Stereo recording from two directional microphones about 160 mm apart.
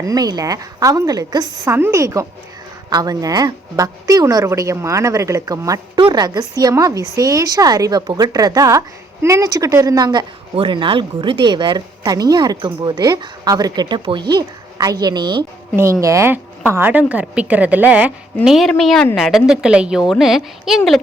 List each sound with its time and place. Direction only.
0.0 s speech: 25° right (ahead or behind)
15.7 s a woman's voice: 15° right (ahead or behind); by 21.0 s centre (ahead or behind)